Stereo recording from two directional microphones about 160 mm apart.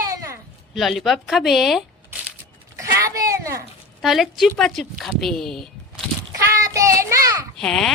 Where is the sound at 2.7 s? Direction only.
20° right (ahead or behind).